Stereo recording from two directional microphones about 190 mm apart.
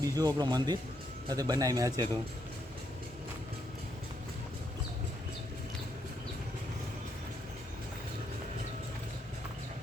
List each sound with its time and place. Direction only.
0.0 s speech: 20° right (ahead or behind)